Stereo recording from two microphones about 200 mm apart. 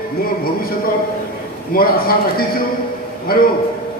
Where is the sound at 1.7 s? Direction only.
45° left (ahead or behind).